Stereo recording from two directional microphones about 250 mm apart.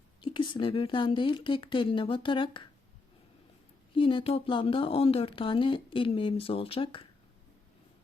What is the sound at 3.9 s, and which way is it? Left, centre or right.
Speech, left.